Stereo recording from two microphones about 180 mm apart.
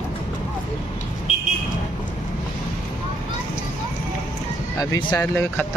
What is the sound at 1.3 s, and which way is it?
Vehicle, 40° left (ahead or behind).